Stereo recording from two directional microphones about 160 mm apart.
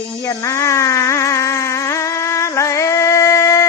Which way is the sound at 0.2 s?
20° left (ahead or behind).